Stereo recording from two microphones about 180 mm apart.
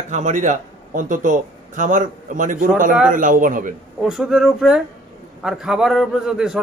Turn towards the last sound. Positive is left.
turn(degrees=-5)  # may be behind; listen again after turning